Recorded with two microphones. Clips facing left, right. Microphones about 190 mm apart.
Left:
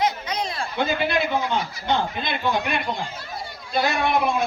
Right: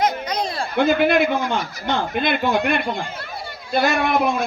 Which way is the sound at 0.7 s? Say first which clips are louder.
Right 8 dB; 55° right (ahead or behind).